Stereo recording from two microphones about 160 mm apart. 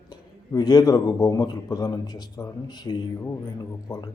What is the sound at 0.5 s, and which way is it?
Speech, 25° left (ahead or behind).